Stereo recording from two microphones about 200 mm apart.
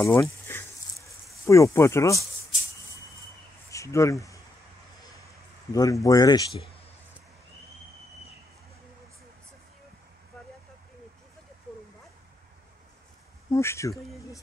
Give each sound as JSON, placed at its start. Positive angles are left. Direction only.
{"t": 0.0, "sound": "snake", "side_deg": 15}
{"t": 3.7, "sound": "speech", "side_deg": 15}
{"t": 5.7, "sound": "a man's voice", "side_deg": 15}
{"t": 13.5, "sound": "speech", "side_deg": 15}